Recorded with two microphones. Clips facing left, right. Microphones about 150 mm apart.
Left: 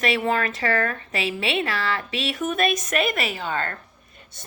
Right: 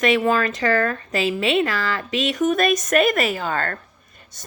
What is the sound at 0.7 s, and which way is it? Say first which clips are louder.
Speech: right 4 dB; 40° right (ahead or behind).